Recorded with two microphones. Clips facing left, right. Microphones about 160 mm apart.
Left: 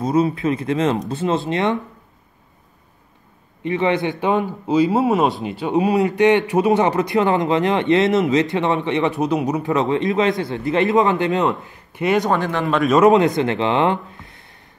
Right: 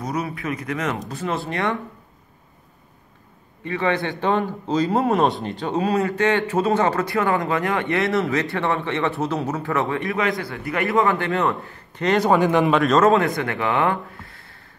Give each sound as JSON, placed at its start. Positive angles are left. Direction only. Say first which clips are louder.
{"t": 0.0, "sound": "speech", "louder": "left 9 dB", "side_deg": 25}
{"t": 3.6, "sound": "a man's voice", "louder": "left 4 dB", "side_deg": 20}
{"t": 12.4, "sound": "speech", "louder": "right 4 dB", "side_deg": -15}
{"t": 12.7, "sound": "a man's voice", "louder": "left 1 dB", "side_deg": 0}
{"t": 13.0, "sound": "speech", "louder": "left 4 dB", "side_deg": 20}